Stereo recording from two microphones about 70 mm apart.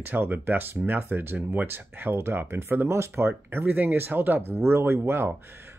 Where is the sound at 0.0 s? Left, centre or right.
Right.